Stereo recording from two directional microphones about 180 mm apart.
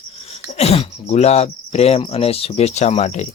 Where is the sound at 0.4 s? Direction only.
35° left (ahead or behind).